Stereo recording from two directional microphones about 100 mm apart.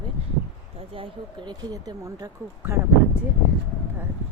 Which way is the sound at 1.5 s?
45° right (ahead or behind).